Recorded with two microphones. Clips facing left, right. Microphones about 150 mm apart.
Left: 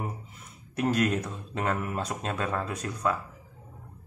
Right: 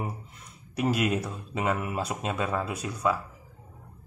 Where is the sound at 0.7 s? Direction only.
5° right (ahead or behind).